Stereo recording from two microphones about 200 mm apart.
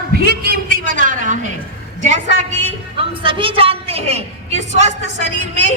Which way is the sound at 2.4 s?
30° right (ahead or behind).